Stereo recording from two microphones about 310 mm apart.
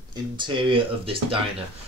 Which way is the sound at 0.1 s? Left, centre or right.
Centre.